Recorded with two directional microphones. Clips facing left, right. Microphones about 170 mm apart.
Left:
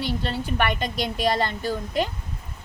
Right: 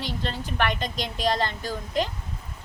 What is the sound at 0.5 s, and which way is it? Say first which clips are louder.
A woman's voice: left 1 dB; 10° left (ahead or behind).